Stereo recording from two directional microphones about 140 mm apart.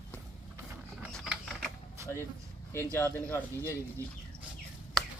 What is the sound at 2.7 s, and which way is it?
Speech, 15° left (ahead or behind).